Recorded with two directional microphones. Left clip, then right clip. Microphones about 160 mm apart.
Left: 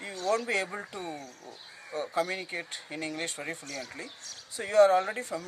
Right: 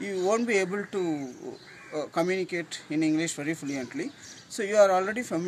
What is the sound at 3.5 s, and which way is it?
Speech, 30° left (ahead or behind).